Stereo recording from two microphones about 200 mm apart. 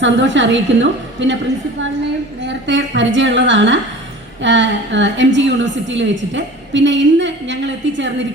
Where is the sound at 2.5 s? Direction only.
65° right (ahead or behind).